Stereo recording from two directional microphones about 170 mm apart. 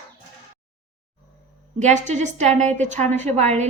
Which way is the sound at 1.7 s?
45° right (ahead or behind).